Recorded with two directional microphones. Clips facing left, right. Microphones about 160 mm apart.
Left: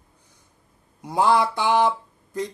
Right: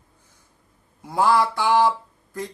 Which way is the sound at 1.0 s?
20° left (ahead or behind).